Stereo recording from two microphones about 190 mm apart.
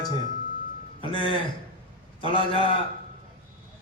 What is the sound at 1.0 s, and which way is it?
A man's voice, 25° left (ahead or behind).